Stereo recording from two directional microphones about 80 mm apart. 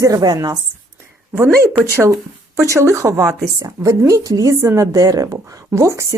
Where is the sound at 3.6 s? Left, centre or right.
Right.